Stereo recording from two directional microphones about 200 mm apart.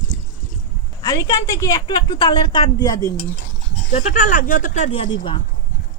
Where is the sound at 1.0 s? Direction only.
20° left (ahead or behind).